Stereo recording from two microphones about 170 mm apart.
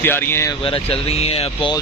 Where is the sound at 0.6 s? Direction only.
30° left (ahead or behind).